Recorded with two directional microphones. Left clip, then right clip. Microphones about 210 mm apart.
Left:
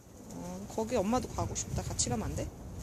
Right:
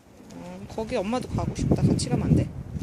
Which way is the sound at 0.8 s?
10° right (ahead or behind).